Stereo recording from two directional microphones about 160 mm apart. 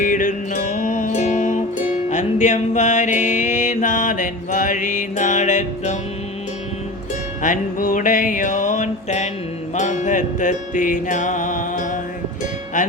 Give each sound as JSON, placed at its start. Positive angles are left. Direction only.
{"t": 0.0, "sound": "music", "side_deg": 55}
{"t": 7.4, "sound": "music", "side_deg": 55}